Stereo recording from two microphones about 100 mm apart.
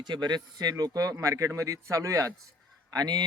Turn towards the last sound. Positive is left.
turn(degrees=-45)  # may be behind; listen again after turning